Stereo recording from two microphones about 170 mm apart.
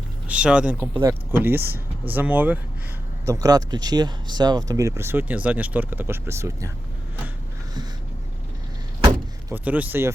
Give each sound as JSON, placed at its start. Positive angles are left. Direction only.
{"t": 0.3, "sound": "speech", "side_deg": -5}
{"t": 3.2, "sound": "speech", "side_deg": -20}
{"t": 9.5, "sound": "speech", "side_deg": -10}